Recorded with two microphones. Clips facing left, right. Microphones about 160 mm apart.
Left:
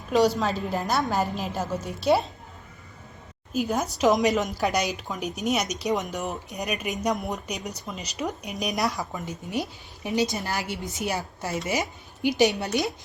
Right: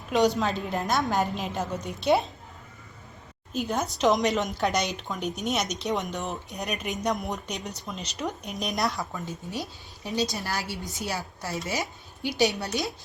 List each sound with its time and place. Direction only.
0.1 s a woman's voice: centre (ahead or behind)
3.5 s a woman's voice: 5° left (ahead or behind)
9.1 s a woman's voice: 20° left (ahead or behind)